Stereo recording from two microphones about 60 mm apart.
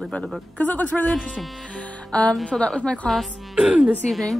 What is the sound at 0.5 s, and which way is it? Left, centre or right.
Speech, left.